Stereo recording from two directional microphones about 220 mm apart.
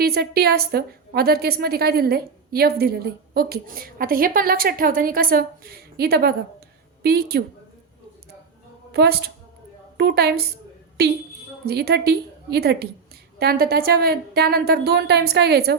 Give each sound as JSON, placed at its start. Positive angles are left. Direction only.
{"t": 0.0, "sound": "a woman's voice", "side_deg": -45}
{"t": 8.9, "sound": "a woman's voice", "side_deg": -45}